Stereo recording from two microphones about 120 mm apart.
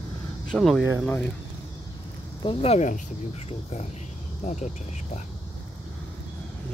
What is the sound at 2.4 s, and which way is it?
Speech, 55° left (ahead or behind).